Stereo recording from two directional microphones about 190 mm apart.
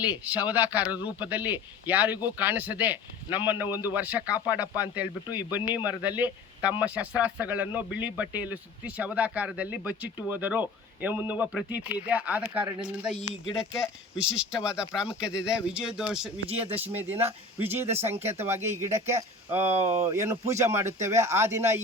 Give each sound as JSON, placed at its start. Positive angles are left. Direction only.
{"t": 0.0, "sound": "speech", "side_deg": -5}
{"t": 14.2, "sound": "speech", "side_deg": -5}